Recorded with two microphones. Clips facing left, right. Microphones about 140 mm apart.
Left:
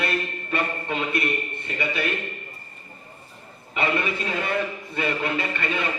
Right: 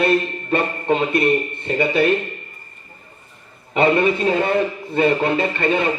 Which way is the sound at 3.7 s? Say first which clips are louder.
Right 9 dB; 30° right (ahead or behind).